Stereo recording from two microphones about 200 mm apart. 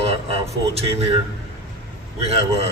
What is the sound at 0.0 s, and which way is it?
Speech, 30° right (ahead or behind).